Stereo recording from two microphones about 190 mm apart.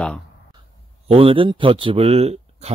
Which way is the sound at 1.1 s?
30° right (ahead or behind).